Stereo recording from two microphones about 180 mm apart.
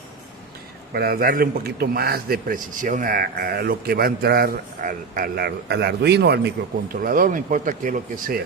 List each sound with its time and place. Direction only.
0.9 s a man's voice: 55° right (ahead or behind)